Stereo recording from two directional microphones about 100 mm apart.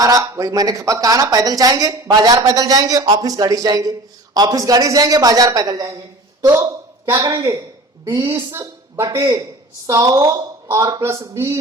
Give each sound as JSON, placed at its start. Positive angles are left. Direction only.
{"t": 0.0, "sound": "speech", "side_deg": -35}
{"t": 6.5, "sound": "a sound", "side_deg": -35}
{"t": 7.1, "sound": "a woman's voice", "side_deg": -30}